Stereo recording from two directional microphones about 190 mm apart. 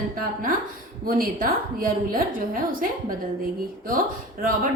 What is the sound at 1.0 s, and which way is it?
A woman's voice, 50° right (ahead or behind).